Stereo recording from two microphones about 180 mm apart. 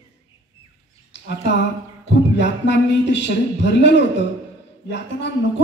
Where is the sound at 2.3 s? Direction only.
80° left.